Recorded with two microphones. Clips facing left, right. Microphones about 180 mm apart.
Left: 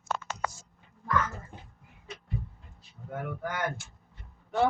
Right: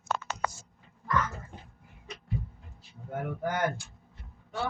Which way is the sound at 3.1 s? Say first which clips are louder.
Right 2 dB; 25° right (ahead or behind).